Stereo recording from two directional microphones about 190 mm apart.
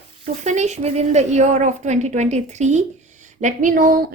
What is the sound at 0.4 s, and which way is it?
A woman's voice, 35° right (ahead or behind).